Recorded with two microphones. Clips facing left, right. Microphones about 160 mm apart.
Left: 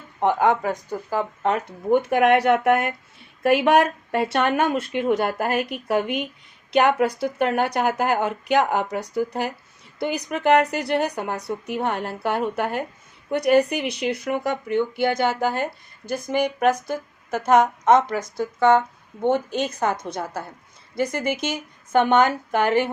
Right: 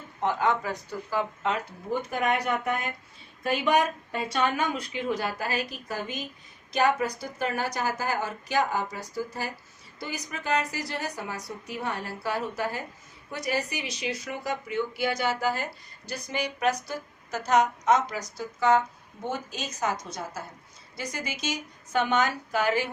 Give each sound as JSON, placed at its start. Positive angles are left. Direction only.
{"t": 0.2, "sound": "speech", "side_deg": 55}